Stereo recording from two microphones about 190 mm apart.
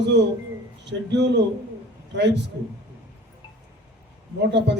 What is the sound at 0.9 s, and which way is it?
Speech, 65° right (ahead or behind).